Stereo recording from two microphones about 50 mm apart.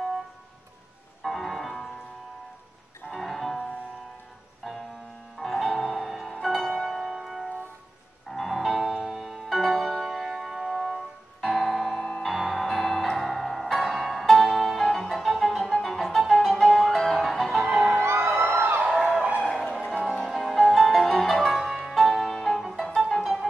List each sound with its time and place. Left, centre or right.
1.2 s music: centre
3.1 s music: centre
4.6 s music: centre
6.9 s music: centre
18.0 s music: right
20.2 s music: centre